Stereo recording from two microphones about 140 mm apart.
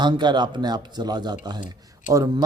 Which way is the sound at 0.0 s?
30° right (ahead or behind).